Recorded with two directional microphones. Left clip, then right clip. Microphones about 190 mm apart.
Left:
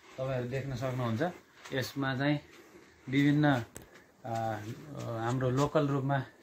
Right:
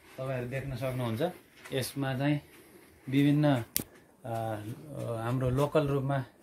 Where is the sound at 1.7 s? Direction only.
50° right (ahead or behind).